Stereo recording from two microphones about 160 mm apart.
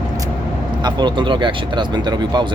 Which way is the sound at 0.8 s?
30° right (ahead or behind).